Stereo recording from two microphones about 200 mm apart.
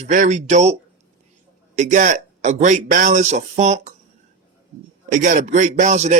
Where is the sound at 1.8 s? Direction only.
40° right (ahead or behind).